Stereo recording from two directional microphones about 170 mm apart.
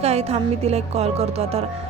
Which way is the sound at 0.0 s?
40° right (ahead or behind).